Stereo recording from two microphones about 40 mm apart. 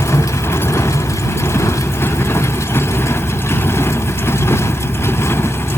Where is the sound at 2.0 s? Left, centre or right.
Left.